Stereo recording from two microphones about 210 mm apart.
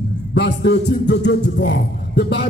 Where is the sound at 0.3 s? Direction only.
55° left (ahead or behind).